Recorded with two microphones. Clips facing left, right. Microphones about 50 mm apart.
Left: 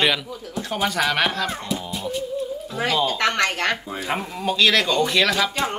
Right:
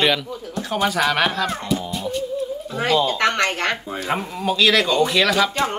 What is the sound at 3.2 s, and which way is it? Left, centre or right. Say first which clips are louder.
Speech: right 1 dB; right.